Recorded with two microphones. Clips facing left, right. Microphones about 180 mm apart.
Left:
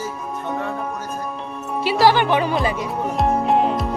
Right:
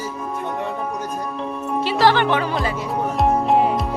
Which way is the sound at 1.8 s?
10° left (ahead or behind).